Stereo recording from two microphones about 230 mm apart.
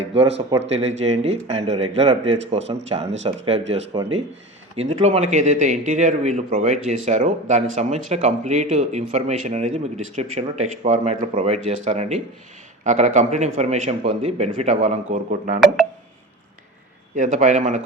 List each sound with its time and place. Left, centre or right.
0.7 s a man's voice: right
15.6 s speech: centre
17.2 s a man's voice: right